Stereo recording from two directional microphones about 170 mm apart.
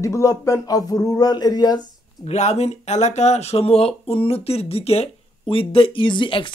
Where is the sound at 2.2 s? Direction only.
40° left (ahead or behind).